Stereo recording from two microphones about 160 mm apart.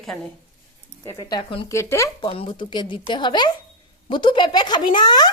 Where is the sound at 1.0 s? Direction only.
25° left (ahead or behind).